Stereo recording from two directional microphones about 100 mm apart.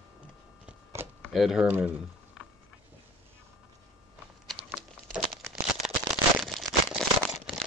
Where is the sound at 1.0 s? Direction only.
25° right (ahead or behind).